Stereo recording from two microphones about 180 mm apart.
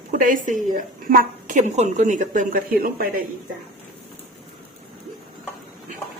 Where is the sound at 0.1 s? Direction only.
50° right (ahead or behind).